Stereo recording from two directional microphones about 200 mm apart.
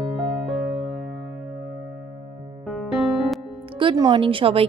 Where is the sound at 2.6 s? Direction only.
Centre (ahead or behind).